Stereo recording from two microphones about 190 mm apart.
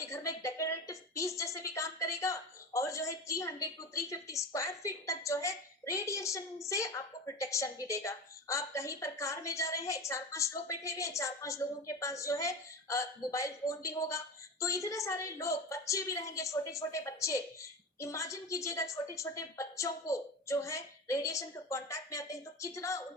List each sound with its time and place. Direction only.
0.0 s a woman's voice: 15° left (ahead or behind)